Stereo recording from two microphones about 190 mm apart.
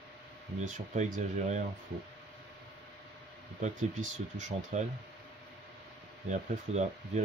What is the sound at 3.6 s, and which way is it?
Speech, 40° right (ahead or behind).